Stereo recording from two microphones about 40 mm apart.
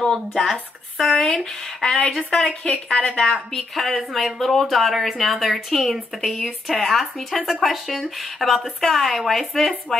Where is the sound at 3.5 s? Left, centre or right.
Centre.